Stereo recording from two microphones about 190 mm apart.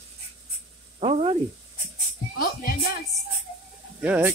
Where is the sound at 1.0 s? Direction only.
30° right (ahead or behind).